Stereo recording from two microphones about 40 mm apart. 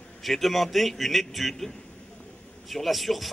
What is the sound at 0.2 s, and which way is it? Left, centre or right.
A man's voice, centre.